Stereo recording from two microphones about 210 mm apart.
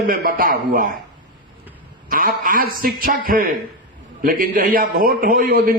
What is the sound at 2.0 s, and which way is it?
A man's voice, 40° right (ahead or behind).